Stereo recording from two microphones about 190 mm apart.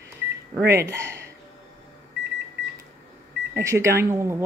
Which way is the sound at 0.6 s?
15° right (ahead or behind).